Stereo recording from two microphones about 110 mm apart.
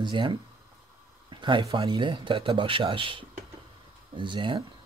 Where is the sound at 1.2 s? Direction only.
45° right (ahead or behind).